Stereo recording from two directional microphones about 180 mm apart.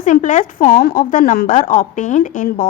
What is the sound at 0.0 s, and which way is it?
A woman's voice, 45° left (ahead or behind).